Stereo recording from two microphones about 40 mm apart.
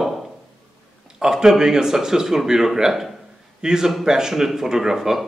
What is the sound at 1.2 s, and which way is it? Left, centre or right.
A man's voice, centre.